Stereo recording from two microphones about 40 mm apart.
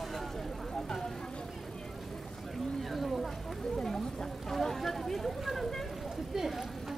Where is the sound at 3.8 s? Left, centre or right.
Centre.